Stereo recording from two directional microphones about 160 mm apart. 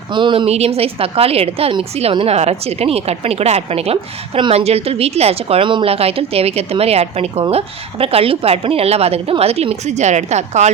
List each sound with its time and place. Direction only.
0.1 s a woman's voice: 30° right (ahead or behind); by 10.7 s 45° right (ahead or behind)